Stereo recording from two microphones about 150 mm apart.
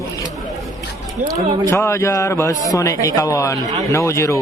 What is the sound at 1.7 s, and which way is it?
A man's voice, 20° left (ahead or behind).